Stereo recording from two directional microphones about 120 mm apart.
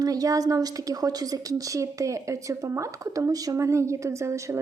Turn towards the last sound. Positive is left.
turn(degrees=-25)  # may be behind; listen again after turning